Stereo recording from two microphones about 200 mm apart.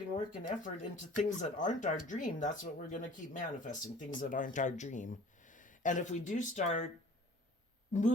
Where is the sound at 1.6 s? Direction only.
40° left (ahead or behind).